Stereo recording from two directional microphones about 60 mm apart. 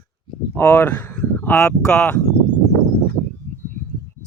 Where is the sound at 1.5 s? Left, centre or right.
Centre.